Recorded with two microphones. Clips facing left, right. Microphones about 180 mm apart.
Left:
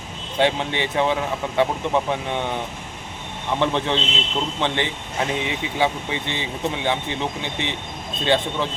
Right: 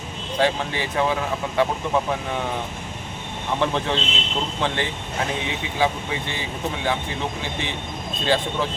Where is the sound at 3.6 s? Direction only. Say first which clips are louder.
Left 2 dB; 20° left (ahead or behind).